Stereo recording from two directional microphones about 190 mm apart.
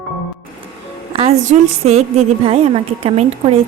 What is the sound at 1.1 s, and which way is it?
A woman's voice, 30° right (ahead or behind).